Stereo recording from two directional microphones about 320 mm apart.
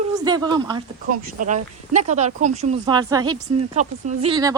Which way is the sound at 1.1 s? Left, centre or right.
Right.